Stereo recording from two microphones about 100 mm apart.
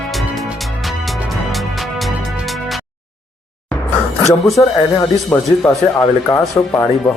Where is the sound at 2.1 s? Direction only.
10° right (ahead or behind).